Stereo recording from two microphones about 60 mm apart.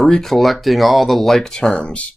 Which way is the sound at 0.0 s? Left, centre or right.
Centre.